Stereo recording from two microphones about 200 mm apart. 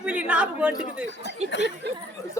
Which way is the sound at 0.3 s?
5° right (ahead or behind).